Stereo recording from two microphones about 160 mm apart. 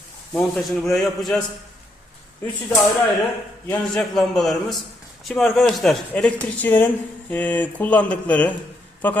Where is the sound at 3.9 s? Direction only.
5° left (ahead or behind).